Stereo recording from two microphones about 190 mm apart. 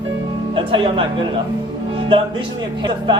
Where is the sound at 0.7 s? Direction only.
25° right (ahead or behind).